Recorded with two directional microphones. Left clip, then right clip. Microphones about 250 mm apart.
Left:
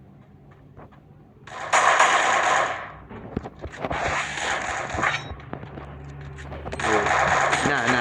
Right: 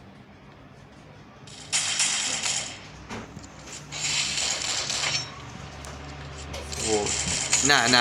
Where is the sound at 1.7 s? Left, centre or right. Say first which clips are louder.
Left 10 dB; left.